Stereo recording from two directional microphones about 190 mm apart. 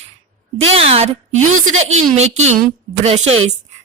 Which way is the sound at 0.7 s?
30° right (ahead or behind).